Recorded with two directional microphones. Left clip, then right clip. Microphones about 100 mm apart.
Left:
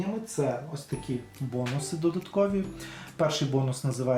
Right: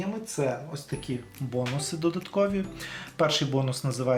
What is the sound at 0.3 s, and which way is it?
Speech, 25° right (ahead or behind).